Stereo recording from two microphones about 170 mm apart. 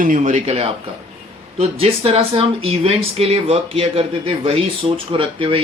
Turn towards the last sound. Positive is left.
turn(degrees=-30)  # may be behind; listen again after turning